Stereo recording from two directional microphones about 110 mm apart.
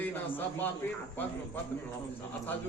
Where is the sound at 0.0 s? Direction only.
15° left (ahead or behind).